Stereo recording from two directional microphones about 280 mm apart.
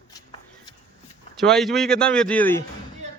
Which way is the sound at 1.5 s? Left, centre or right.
Centre.